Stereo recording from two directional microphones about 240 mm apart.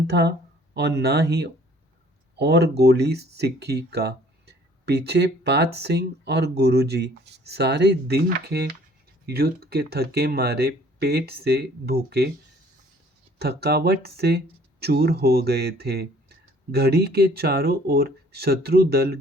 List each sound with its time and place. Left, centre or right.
0.1 s speech: right
13.4 s speech: right